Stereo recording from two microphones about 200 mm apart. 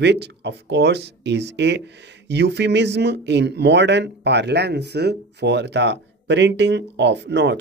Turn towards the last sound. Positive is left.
turn(degrees=-60)  # may be behind; listen again after turning